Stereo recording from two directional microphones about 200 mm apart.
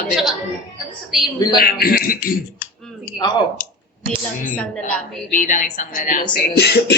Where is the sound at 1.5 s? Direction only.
50° left (ahead or behind).